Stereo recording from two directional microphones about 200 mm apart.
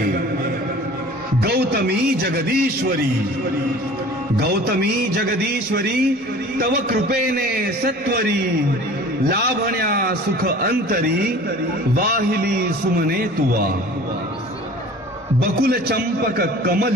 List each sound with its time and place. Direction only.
1.4 s speech: 55° right (ahead or behind)
4.4 s a man's voice: 50° right (ahead or behind)
9.3 s a man's voice: 50° right (ahead or behind)
15.6 s a man's voice: 50° right (ahead or behind)